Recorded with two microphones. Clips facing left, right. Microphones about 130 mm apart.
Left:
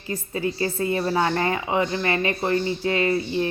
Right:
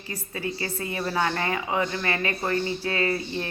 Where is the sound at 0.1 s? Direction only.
30° left (ahead or behind).